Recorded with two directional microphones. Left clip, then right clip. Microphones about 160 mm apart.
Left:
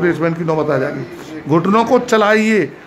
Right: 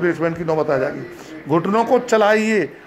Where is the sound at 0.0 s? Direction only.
5° right (ahead or behind).